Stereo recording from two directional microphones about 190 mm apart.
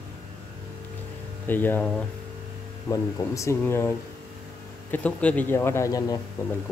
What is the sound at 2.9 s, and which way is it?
Speech, 15° left (ahead or behind).